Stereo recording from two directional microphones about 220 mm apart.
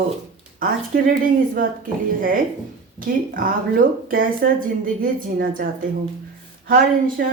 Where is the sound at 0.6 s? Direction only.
40° right (ahead or behind).